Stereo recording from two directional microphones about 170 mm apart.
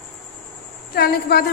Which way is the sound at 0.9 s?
65° left (ahead or behind).